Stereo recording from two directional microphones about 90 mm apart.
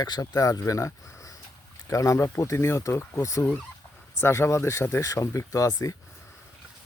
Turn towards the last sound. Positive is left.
turn(degrees=40)  # may be behind; listen again after turning